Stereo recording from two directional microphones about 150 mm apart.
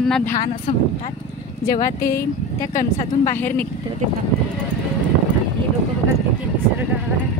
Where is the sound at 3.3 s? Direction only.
10° left (ahead or behind).